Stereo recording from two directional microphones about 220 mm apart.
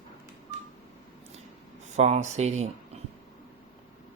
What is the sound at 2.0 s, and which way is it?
Speech, 30° right (ahead or behind).